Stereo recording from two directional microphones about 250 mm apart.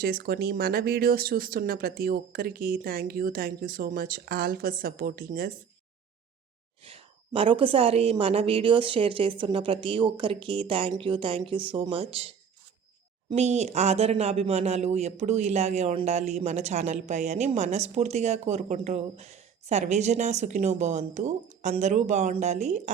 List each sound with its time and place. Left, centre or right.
0.0 s speech: right
6.8 s speech: right
13.3 s speech: right